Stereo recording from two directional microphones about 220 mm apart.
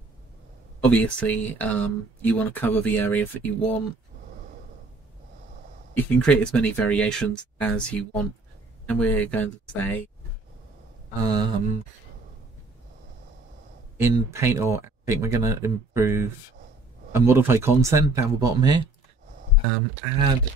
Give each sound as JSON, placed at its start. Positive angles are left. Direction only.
{"t": 0.8, "sound": "speech", "side_deg": 5}
{"t": 5.9, "sound": "speech", "side_deg": 5}
{"t": 11.2, "sound": "speech", "side_deg": -20}
{"t": 13.9, "sound": "speech", "side_deg": -10}